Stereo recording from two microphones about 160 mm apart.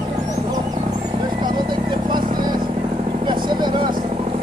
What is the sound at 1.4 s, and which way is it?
Vehicle, 30° right (ahead or behind).